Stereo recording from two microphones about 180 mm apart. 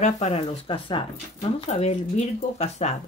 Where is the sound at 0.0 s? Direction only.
35° left (ahead or behind).